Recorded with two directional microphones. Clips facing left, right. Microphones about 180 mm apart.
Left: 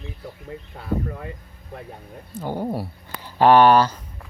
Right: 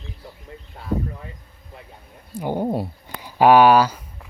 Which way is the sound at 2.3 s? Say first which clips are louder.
Right 3 dB; 15° right (ahead or behind).